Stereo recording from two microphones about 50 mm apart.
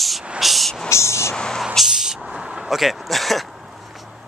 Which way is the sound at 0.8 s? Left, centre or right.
Left.